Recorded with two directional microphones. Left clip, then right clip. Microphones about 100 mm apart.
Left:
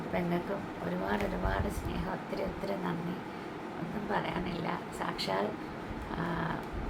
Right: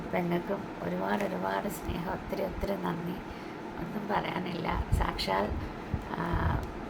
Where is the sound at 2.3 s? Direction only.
40° right (ahead or behind).